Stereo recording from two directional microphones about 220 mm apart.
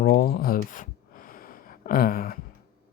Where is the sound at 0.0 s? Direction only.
45° left (ahead or behind).